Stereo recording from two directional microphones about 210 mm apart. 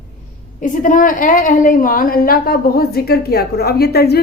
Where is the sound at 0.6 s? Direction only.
40° left (ahead or behind).